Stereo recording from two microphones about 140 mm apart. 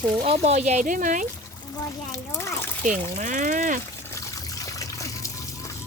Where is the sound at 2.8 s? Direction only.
70° right (ahead or behind).